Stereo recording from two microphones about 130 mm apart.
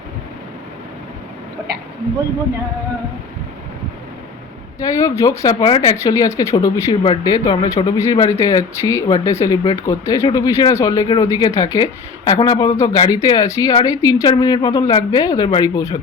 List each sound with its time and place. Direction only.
4.8 s speech: 25° left (ahead or behind)